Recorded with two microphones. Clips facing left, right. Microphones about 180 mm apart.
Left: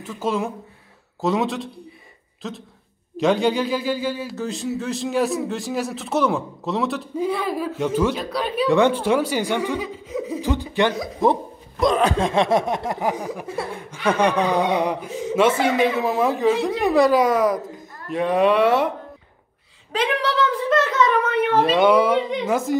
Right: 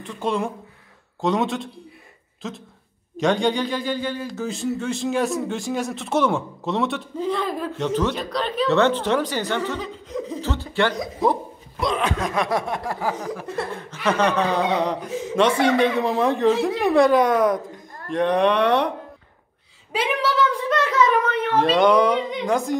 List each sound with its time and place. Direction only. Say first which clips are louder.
0.0 s a man's voice: even; 5° left (ahead or behind)
11.8 s a man's voice: left 5 dB; 40° left (ahead or behind); by 18.9 s 5° left (ahead or behind)
19.9 s a man's voice: left 1 dB; 5° right (ahead or behind)